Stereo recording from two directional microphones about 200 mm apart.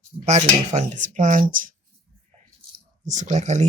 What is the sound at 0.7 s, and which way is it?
Speech, 35° right (ahead or behind).